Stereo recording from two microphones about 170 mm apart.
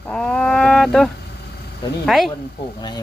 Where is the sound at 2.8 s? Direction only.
25° left (ahead or behind).